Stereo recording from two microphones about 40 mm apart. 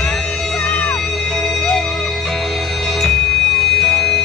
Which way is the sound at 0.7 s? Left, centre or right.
Left.